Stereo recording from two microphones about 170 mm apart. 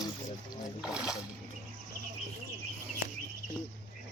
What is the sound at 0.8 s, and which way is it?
Speech, 5° right (ahead or behind).